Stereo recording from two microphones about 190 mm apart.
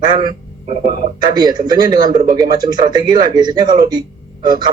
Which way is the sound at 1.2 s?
20° right (ahead or behind).